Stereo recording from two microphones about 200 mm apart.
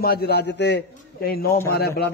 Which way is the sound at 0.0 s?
50° left (ahead or behind).